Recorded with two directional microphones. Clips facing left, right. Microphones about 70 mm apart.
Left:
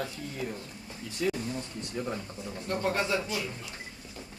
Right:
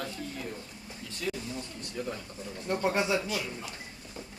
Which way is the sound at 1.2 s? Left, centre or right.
Centre.